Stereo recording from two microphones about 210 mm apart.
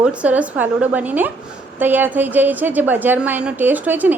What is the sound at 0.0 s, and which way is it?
A woman's voice, 5° right (ahead or behind).